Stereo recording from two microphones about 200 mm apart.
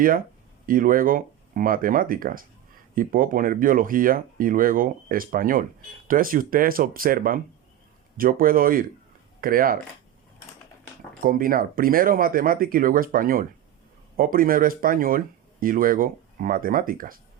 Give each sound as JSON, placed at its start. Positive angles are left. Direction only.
{"t": 0.6, "sound": "speech", "side_deg": -45}
{"t": 11.2, "sound": "speech", "side_deg": -45}